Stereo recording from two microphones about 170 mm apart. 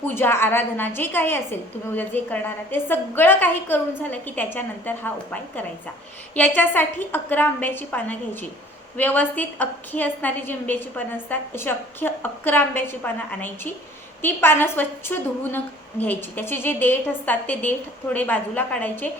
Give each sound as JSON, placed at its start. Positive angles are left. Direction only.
{"t": 0.1, "sound": "a woman's voice", "side_deg": 15}